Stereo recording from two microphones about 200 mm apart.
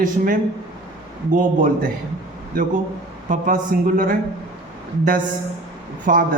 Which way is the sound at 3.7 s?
45° right (ahead or behind).